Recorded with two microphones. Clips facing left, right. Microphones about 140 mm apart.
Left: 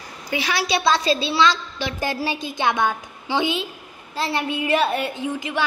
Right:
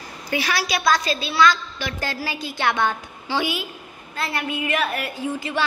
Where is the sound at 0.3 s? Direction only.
20° left (ahead or behind).